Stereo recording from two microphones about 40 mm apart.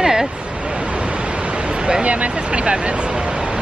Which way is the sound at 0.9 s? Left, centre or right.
Right.